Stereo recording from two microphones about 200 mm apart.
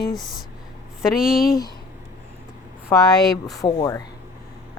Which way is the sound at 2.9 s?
20° left (ahead or behind).